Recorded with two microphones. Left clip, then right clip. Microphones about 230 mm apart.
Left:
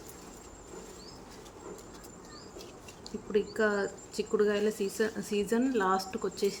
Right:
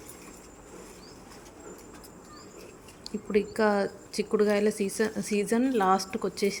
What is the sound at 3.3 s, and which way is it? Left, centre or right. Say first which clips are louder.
Speech: right 4 dB; right.